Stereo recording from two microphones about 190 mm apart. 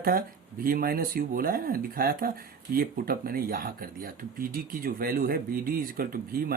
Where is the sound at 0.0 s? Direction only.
50° right (ahead or behind).